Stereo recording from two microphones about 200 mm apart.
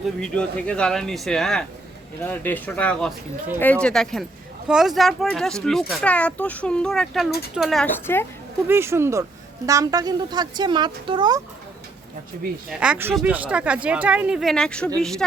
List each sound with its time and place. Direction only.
0.2 s a child's voice: 5° left (ahead or behind)
8.6 s speech: 10° right (ahead or behind)
12.6 s a child's voice: 5° right (ahead or behind)